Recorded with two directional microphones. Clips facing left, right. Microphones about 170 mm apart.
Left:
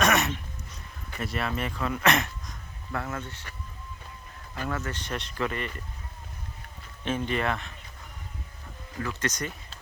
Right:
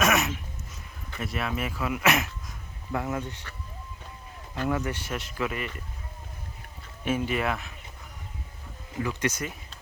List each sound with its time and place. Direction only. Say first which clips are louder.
0.0 s a sound: even; centre (ahead or behind)
1.2 s speech: even; centre (ahead or behind)
2.9 s speech: right 3 dB; 15° right (ahead or behind)
4.5 s speech: right 4 dB; 15° right (ahead or behind)
7.0 s speech: right 1 dB; 10° right (ahead or behind)
8.9 s speech: right 3 dB; 15° right (ahead or behind)